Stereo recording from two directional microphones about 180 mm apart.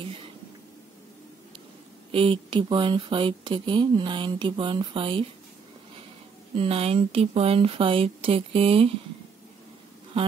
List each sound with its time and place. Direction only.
2.1 s speech: 30° right (ahead or behind)
6.5 s speech: 30° right (ahead or behind)